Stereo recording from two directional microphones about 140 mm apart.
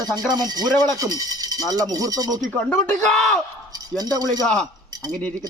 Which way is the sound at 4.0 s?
25° right (ahead or behind).